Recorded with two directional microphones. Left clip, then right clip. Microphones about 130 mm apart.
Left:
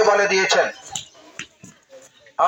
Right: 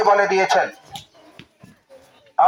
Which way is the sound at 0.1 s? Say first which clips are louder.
Right 1 dB; 25° right (ahead or behind).